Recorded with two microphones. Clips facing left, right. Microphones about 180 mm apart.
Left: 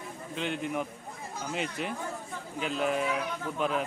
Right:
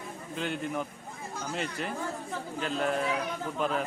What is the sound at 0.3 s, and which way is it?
Speech, centre (ahead or behind).